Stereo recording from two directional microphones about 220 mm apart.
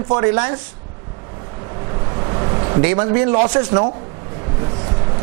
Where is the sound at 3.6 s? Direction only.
25° right (ahead or behind).